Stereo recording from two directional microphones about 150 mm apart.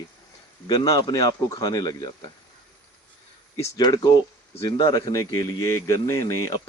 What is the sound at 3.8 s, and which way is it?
Speech, 25° left (ahead or behind).